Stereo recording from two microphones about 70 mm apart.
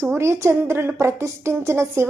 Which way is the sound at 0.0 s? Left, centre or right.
Right.